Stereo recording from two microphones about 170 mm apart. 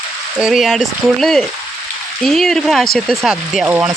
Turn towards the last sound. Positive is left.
turn(degrees=-5)  # may be behind; listen again after turning